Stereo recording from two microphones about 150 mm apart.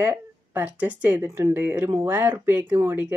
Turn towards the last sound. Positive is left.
turn(degrees=-15)  # may be behind; listen again after turning